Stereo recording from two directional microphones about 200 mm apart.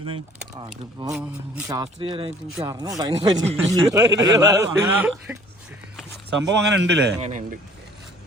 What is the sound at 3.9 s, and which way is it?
A man's voice, 20° right (ahead or behind).